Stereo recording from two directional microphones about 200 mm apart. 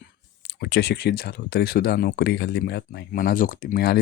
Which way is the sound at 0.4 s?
55° left (ahead or behind).